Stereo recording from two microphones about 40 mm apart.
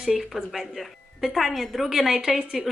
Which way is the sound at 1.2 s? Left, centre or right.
Centre.